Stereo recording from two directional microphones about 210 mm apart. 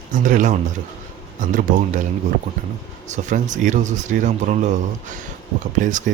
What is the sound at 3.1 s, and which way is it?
Speech, 35° right (ahead or behind).